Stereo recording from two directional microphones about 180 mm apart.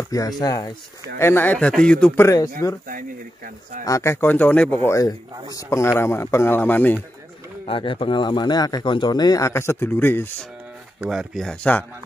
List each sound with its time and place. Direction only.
0.4 s speech: 20° left (ahead or behind)
2.9 s speech: 50° right (ahead or behind)
3.8 s speech: 15° left (ahead or behind)
7.6 s speech: 30° left (ahead or behind); by 10.3 s 10° left (ahead or behind)
11.0 s speech: centre (ahead or behind)